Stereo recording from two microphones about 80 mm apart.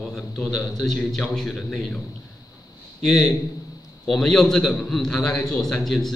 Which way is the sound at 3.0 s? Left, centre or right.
Centre.